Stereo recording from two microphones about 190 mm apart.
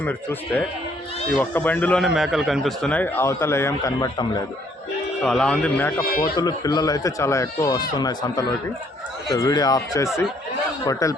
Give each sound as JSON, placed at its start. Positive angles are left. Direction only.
{"t": 0.0, "sound": "a man's voice", "side_deg": 10}
{"t": 5.2, "sound": "a man's voice", "side_deg": 5}
{"t": 6.0, "sound": "speech", "side_deg": 50}
{"t": 6.3, "sound": "speech", "side_deg": 20}